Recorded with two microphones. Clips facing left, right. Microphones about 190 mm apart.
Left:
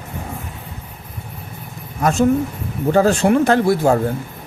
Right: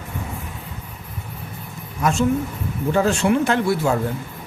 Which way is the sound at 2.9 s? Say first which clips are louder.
Left 4 dB; 40° left (ahead or behind).